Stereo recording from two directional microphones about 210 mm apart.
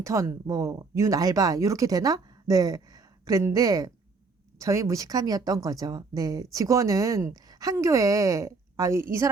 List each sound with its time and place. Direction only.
0.0 s speech: 15° right (ahead or behind)